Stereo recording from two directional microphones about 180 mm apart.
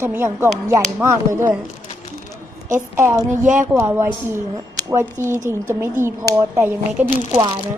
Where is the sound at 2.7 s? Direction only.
15° right (ahead or behind).